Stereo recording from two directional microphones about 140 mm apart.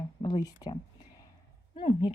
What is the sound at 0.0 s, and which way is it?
Speech, 30° left (ahead or behind).